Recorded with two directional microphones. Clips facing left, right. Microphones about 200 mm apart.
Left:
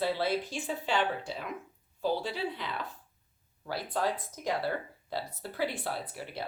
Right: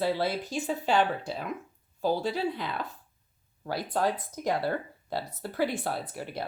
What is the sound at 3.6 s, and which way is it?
Speech, 45° right (ahead or behind).